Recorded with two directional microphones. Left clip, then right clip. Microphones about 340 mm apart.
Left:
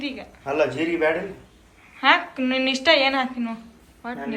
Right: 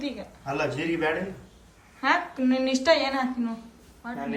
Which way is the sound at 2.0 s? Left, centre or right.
Centre.